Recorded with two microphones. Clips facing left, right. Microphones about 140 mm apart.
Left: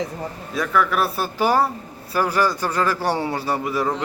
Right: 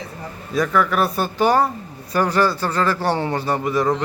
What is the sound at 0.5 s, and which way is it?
A man's voice, centre (ahead or behind).